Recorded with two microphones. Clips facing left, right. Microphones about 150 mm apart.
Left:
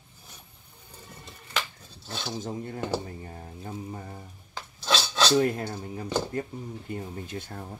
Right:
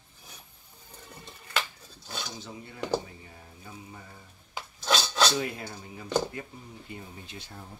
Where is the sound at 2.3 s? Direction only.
45° left (ahead or behind).